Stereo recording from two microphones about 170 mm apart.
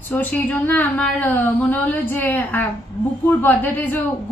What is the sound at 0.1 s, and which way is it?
Speech, 10° left (ahead or behind).